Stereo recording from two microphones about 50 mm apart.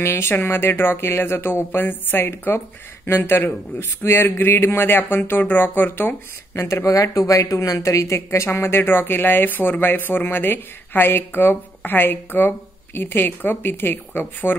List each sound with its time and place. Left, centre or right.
0.0 s speech: left
6.8 s speech: left